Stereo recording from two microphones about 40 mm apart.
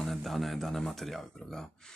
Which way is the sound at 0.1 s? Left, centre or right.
Centre.